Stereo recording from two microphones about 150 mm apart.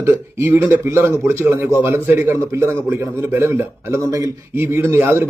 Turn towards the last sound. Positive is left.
turn(degrees=-15)  # may be behind; listen again after turning